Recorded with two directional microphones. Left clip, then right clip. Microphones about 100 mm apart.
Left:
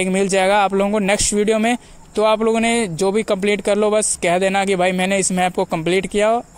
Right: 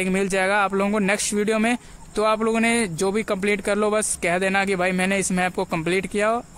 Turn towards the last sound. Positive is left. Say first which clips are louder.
# left 5 dB
turn(degrees=30)  # may be behind; listen again after turning